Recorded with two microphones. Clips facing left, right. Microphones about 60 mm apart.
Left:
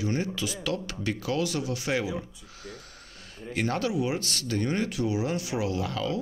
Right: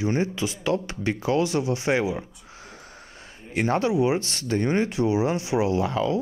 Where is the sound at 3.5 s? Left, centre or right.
Right.